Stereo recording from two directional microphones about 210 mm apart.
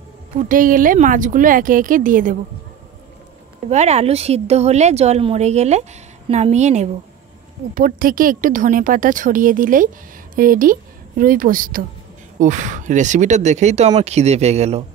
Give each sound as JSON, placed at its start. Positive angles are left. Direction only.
{"t": 0.5, "sound": "speech", "side_deg": -40}
{"t": 3.6, "sound": "a woman's voice", "side_deg": -30}